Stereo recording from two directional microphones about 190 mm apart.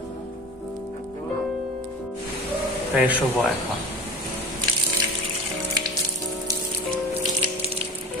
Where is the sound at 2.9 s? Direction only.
10° right (ahead or behind).